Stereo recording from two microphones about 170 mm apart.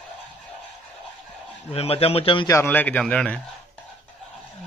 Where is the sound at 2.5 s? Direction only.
15° left (ahead or behind).